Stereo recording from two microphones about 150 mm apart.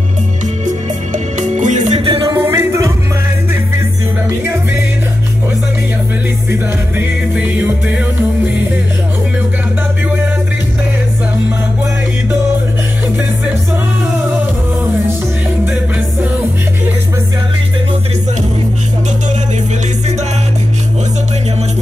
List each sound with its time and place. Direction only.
1.1 s music: 55° right (ahead or behind)
2.0 s music: 35° right (ahead or behind)
2.4 s music: 15° right (ahead or behind)
7.0 s music: 10° right (ahead or behind)